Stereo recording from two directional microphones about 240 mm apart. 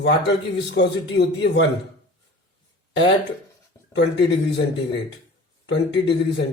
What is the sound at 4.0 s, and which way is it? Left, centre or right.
A man's voice, left.